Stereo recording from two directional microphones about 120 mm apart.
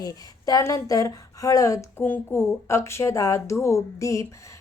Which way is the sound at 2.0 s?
20° left (ahead or behind).